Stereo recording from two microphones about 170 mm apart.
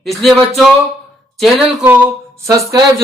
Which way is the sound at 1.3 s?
Centre (ahead or behind).